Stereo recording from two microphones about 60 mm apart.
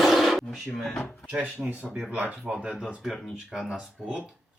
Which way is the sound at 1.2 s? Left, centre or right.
Right.